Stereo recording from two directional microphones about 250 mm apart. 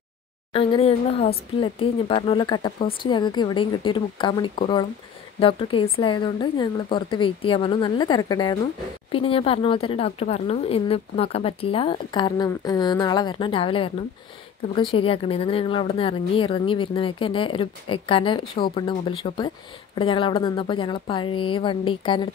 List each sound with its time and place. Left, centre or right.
0.5 s speech: left